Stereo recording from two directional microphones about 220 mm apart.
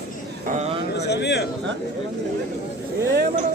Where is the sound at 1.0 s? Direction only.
50° left (ahead or behind).